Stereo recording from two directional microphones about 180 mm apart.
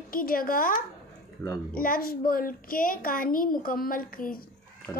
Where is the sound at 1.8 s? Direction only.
55° left (ahead or behind).